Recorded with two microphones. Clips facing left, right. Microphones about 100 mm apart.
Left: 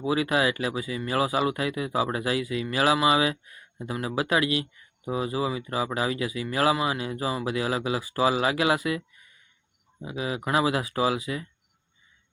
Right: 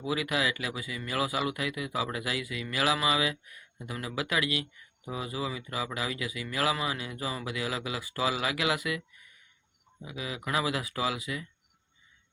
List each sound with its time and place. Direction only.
0.0 s speech: 35° left (ahead or behind)